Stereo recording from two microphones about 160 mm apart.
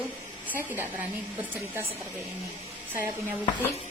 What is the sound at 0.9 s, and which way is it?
Speech, 10° right (ahead or behind).